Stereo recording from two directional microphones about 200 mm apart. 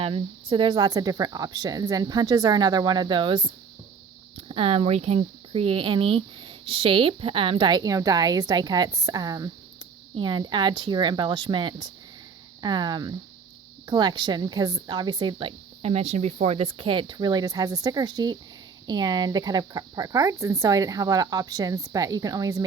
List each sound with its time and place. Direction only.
0.0 s speech: 25° right (ahead or behind)